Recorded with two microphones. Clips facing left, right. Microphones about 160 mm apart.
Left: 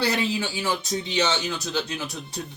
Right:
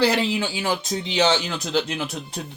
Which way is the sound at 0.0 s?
85° right.